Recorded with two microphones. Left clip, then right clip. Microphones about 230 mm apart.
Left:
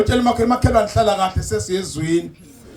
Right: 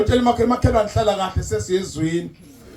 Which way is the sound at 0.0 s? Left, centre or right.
Left.